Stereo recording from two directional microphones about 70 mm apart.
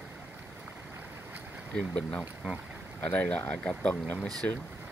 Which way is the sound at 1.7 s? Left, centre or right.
Centre.